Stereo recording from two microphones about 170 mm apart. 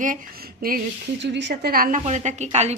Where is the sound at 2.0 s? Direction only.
40° right (ahead or behind).